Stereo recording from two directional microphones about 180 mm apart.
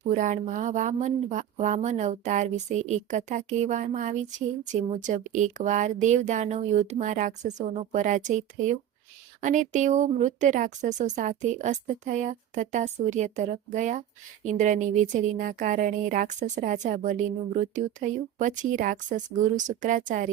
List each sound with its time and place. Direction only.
0.1 s a woman's voice: 45° right (ahead or behind)